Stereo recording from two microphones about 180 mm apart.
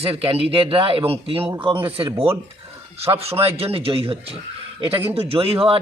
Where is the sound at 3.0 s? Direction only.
35° right (ahead or behind).